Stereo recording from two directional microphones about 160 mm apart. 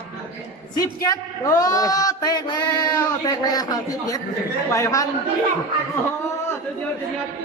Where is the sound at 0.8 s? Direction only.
25° left (ahead or behind).